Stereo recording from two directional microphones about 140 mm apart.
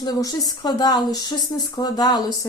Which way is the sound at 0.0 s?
25° left (ahead or behind).